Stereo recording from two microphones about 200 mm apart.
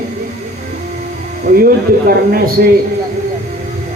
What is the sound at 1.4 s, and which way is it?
Speech, 50° right (ahead or behind).